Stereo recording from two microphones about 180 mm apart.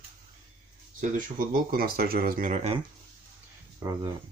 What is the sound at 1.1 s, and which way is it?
Speech, 50° right (ahead or behind).